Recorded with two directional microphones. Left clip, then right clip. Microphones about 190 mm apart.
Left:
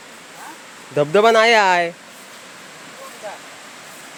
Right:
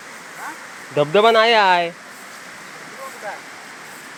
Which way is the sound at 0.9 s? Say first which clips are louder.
Even; 25° left (ahead or behind).